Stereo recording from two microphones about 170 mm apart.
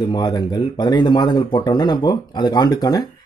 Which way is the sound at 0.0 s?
25° left (ahead or behind).